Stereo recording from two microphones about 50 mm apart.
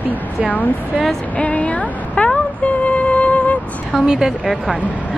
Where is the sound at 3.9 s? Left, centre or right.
Centre.